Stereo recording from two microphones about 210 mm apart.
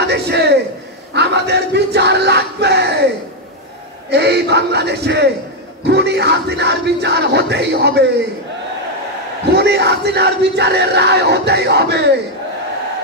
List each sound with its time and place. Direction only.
0.0 s a sound: 55° right (ahead or behind)
1.1 s crowd: 50° right (ahead or behind)
4.1 s crowd: 50° right (ahead or behind)
9.6 s crowd: 50° right (ahead or behind)